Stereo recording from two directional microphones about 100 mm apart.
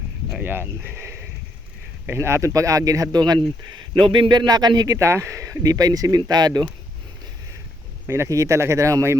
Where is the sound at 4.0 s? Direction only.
55° right (ahead or behind).